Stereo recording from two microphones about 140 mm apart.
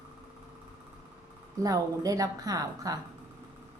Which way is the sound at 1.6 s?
25° right (ahead or behind).